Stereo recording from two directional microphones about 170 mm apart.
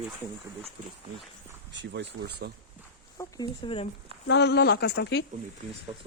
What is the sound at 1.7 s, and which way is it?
Speech, 90° right.